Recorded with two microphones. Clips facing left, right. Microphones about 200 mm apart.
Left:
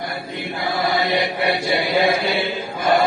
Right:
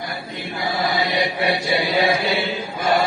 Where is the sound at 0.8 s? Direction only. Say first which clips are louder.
Left 2 dB; 55° left (ahead or behind).